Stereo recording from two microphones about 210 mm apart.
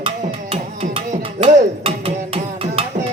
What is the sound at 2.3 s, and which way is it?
Music, 25° right (ahead or behind).